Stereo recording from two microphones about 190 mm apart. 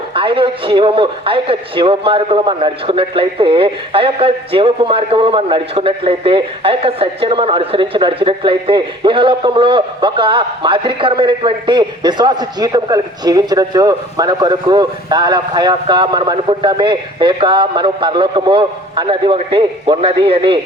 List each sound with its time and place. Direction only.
0.1 s speech: 25° right (ahead or behind)